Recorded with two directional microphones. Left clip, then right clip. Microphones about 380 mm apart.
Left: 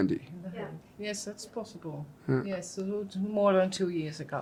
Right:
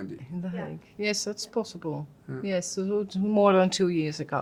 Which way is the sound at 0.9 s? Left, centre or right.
Right.